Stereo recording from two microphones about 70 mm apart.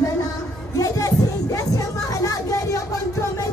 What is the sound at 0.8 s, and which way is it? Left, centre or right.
Music, left.